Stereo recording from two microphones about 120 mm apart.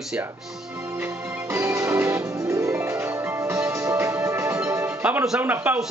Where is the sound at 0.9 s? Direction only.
20° right (ahead or behind).